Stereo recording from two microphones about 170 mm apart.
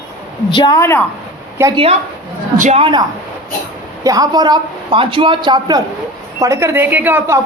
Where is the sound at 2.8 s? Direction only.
25° right (ahead or behind).